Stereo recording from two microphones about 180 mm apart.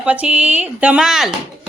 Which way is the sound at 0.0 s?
5° right (ahead or behind).